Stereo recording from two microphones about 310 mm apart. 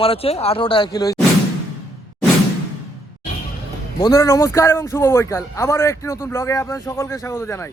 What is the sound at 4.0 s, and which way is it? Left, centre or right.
Speech, centre.